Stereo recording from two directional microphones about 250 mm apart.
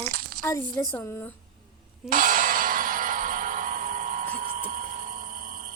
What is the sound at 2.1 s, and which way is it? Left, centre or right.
Clang, right.